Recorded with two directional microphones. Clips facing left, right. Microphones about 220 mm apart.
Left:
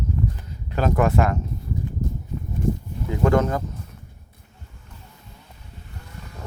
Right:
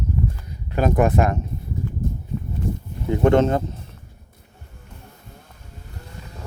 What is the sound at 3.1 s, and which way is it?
Speech, 25° right (ahead or behind).